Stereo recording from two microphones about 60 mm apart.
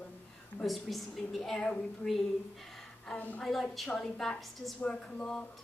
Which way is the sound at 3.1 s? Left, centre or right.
Left.